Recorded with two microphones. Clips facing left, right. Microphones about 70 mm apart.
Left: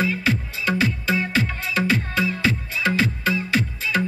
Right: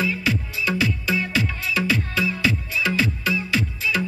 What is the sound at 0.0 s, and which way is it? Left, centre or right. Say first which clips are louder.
Music: left 1 dB; left.